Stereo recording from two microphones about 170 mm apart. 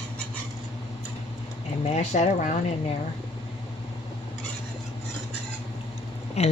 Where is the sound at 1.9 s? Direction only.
40° left (ahead or behind).